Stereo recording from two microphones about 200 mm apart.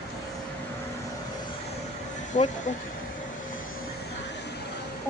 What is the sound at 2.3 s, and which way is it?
Speech, 35° left (ahead or behind).